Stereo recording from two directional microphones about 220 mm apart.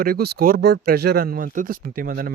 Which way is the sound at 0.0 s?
45° right (ahead or behind).